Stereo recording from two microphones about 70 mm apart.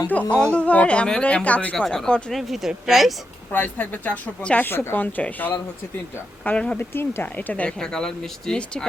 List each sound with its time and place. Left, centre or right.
0.3 s speech: centre
1.7 s speech: centre
2.3 s a woman's voice: centre
3.5 s a woman's voice: left
4.7 s a woman's voice: left; by 6.7 s centre
6.7 s a woman's voice: left
7.8 s speech: centre